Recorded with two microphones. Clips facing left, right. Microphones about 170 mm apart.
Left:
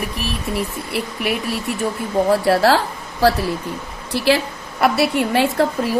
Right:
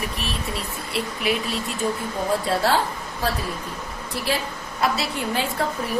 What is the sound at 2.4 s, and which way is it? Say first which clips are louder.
A woman's voice: left 6 dB; 85° left.